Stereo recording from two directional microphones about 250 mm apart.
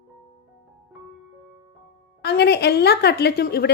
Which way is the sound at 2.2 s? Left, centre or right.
Left.